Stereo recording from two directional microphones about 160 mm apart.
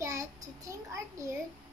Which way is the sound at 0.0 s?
20° right (ahead or behind).